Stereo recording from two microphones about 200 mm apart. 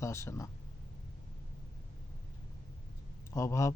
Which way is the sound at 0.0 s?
15° left (ahead or behind).